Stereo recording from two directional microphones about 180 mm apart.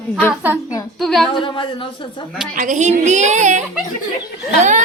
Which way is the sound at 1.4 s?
30° left (ahead or behind).